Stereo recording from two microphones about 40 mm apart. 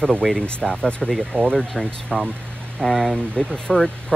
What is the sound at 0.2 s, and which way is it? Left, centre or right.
Speech, centre.